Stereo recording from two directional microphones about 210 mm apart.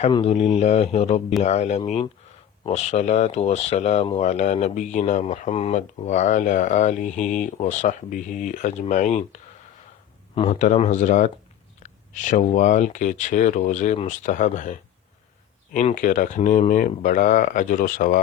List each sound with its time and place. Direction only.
0.0 s speech: 30° left (ahead or behind)
10.3 s speech: 30° left (ahead or behind)